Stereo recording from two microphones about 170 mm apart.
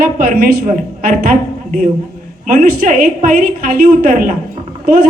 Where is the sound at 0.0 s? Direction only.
60° right (ahead or behind).